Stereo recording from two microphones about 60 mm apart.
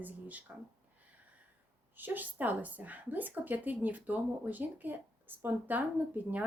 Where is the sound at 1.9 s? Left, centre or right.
Right.